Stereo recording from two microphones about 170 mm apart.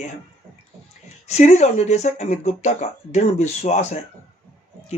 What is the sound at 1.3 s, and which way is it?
Speech, 45° left (ahead or behind).